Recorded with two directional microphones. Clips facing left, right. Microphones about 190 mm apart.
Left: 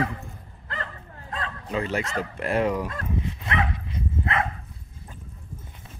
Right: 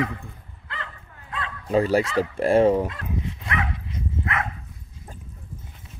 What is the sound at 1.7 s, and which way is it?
Speech, 35° right (ahead or behind).